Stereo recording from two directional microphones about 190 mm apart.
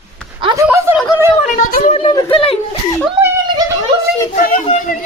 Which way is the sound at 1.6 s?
45° left (ahead or behind).